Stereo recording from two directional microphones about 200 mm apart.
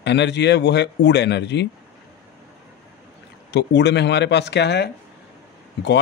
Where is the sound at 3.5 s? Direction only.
60° left (ahead or behind).